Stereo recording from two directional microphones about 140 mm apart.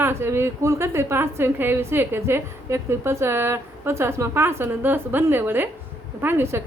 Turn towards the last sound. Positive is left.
turn(degrees=-15)  # may be behind; listen again after turning